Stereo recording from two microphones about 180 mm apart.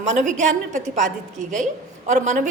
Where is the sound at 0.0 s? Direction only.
40° right (ahead or behind).